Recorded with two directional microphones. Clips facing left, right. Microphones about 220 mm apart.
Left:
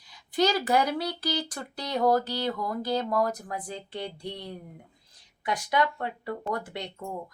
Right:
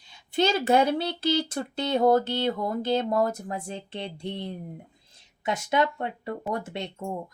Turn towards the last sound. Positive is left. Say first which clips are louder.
# right 2 dB
turn(degrees=-25)  # may be behind; listen again after turning